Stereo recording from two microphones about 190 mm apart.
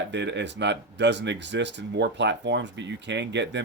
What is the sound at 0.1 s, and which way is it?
Speech, 65° right (ahead or behind).